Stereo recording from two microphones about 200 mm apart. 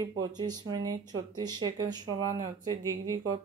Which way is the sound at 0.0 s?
20° right (ahead or behind).